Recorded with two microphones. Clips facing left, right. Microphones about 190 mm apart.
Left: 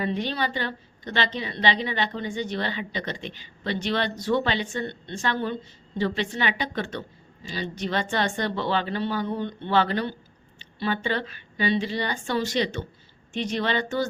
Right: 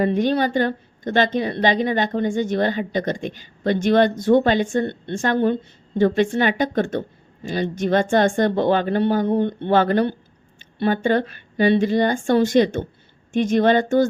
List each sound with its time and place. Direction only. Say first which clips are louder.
0.0 s a woman's voice: right 9 dB; 50° right (ahead or behind)